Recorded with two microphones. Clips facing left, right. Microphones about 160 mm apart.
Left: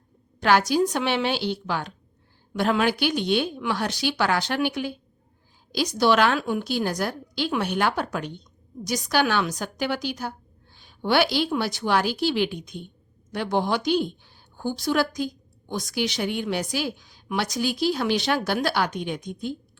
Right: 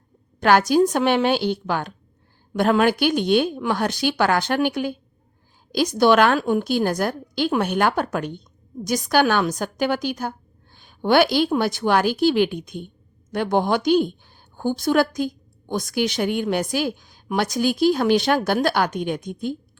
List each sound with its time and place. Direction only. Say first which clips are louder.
0.3 s a woman's voice: right 4 dB; 50° right (ahead or behind)